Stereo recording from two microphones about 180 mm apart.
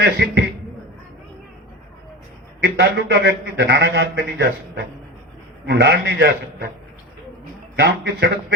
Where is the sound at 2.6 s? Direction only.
70° right (ahead or behind).